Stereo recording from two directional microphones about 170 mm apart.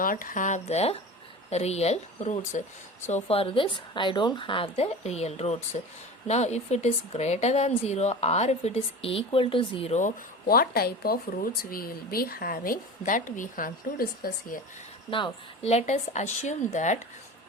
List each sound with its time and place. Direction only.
0.0 s a woman's voice: 55° left (ahead or behind)
3.2 s speech: 35° left (ahead or behind)
10.5 s speech: 65° left (ahead or behind)
15.1 s a woman's voice: 35° left (ahead or behind)